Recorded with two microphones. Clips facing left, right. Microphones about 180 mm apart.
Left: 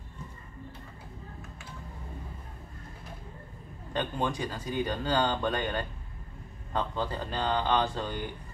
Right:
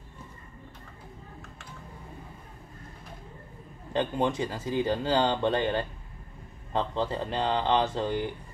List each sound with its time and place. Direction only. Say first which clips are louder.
3.9 s speech: right 4 dB; 25° right (ahead or behind)